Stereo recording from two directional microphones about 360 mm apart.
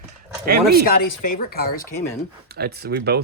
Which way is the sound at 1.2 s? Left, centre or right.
Left.